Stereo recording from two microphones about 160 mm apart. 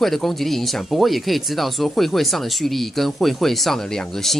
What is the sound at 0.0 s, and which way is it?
Speech, centre (ahead or behind).